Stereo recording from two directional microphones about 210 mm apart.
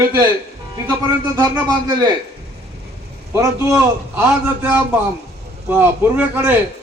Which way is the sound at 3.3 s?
15° right (ahead or behind).